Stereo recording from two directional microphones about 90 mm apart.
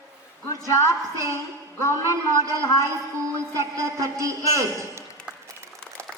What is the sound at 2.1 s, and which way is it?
Speech, 35° right (ahead or behind).